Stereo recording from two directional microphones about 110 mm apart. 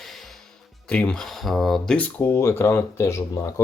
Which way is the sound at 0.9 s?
10° left (ahead or behind).